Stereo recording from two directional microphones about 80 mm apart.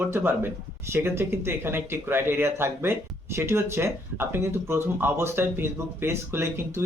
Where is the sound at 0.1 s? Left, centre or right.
Right.